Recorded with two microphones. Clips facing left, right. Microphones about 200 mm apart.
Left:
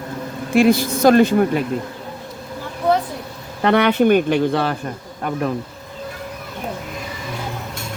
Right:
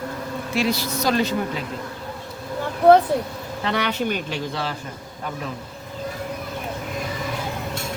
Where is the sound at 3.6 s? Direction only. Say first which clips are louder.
Left 10 dB; 55° left (ahead or behind).